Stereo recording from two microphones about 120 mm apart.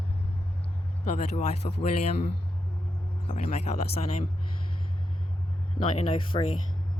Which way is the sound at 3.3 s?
80° left.